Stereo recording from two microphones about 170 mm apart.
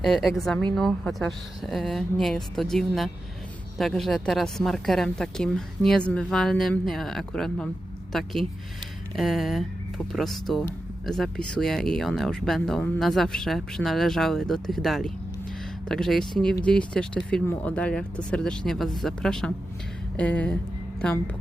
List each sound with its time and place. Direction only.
0.0 s speech: centre (ahead or behind)